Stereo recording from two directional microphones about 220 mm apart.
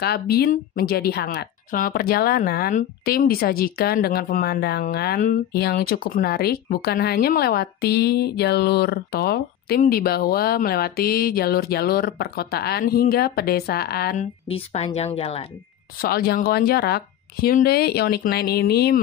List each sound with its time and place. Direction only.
0.0 s speech: 45° left (ahead or behind)
14.5 s speech: 30° left (ahead or behind)
16.0 s speech: 45° left (ahead or behind)